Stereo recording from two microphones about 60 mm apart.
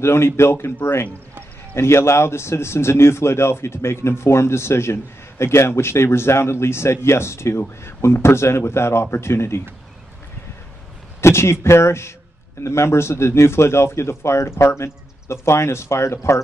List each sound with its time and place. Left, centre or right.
0.0 s a man's voice: left
1.8 s a man's voice: left
11.1 s a man's voice: left